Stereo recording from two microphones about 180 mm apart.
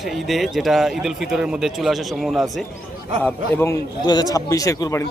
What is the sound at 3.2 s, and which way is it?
A man's voice, 15° left (ahead or behind).